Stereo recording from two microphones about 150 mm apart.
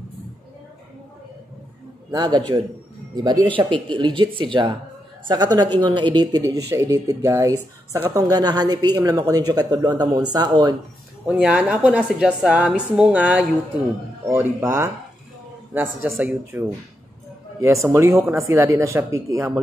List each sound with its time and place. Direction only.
2.0 s speech: 30° right (ahead or behind)
11.2 s a woman's voice: 10° right (ahead or behind)